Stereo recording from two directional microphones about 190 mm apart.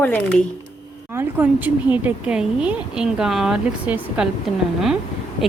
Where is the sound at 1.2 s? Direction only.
10° right (ahead or behind).